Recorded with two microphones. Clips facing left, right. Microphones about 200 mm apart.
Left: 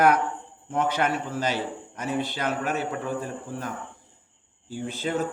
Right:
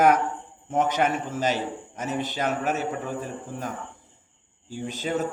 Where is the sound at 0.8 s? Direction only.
45° right (ahead or behind).